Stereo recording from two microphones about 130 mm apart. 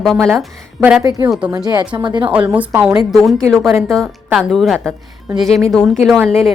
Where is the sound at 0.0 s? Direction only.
Centre (ahead or behind).